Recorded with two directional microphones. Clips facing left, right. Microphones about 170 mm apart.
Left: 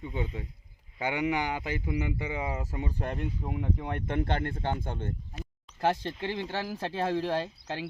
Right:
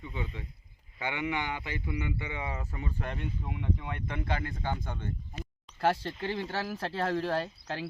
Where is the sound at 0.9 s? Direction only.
40° left (ahead or behind).